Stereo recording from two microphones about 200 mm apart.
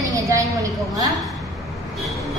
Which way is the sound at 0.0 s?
15° right (ahead or behind).